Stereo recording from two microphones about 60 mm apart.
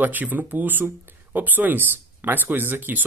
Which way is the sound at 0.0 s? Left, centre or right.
Right.